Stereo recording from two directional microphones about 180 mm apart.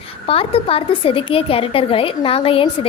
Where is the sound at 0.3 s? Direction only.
30° left (ahead or behind).